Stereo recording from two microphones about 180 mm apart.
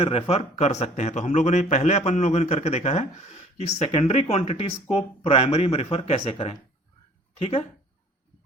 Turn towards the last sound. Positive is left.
turn(degrees=35)  # may be behind; listen again after turning